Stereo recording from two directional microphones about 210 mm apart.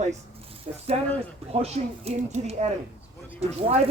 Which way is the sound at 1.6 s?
30° right (ahead or behind).